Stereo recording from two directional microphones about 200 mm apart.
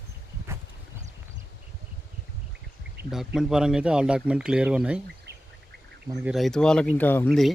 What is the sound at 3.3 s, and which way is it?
Speech, 5° right (ahead or behind).